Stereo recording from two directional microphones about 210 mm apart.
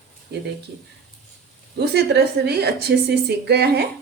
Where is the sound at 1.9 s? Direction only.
50° right (ahead or behind).